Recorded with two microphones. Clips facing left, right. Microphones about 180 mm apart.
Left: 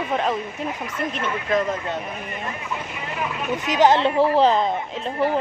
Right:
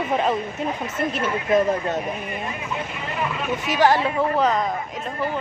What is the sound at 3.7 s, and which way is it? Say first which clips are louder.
Speech: left 2 dB; 20° left (ahead or behind).